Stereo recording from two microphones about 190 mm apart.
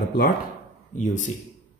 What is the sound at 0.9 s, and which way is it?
Speech, 40° left (ahead or behind).